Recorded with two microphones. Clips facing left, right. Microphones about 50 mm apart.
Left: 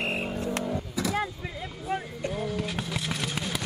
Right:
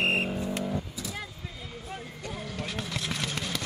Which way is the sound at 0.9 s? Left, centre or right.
Left.